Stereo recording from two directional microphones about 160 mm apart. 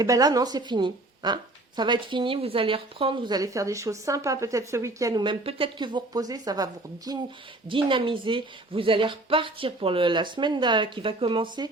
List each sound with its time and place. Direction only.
0.0 s speech: 25° right (ahead or behind)